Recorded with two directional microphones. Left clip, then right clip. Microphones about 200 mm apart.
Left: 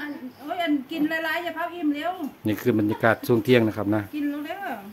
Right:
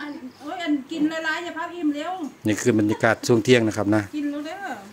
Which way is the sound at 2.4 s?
10° right (ahead or behind).